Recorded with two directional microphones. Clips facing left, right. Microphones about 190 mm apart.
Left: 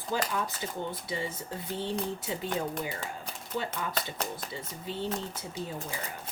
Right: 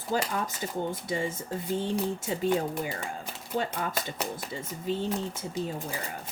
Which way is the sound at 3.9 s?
10° right (ahead or behind).